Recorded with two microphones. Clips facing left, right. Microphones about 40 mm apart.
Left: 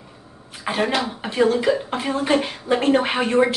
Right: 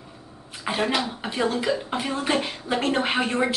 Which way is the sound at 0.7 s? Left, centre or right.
Centre.